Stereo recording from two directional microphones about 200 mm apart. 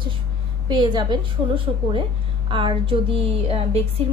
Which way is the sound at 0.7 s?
20° right (ahead or behind).